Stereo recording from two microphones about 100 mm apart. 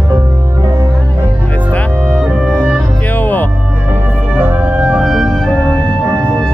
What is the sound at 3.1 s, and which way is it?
Music, 15° left (ahead or behind).